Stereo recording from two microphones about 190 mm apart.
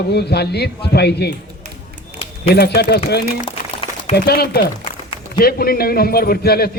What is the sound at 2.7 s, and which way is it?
Speech, 60° left (ahead or behind).